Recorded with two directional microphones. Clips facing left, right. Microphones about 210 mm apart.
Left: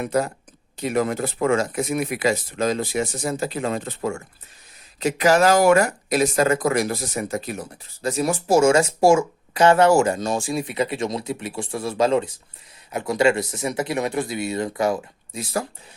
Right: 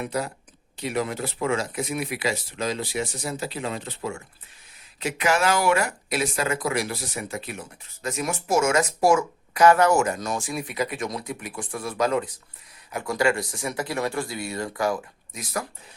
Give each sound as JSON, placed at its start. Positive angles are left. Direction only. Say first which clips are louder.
{"t": 0.0, "sound": "speech", "louder": "left 6 dB", "side_deg": 45}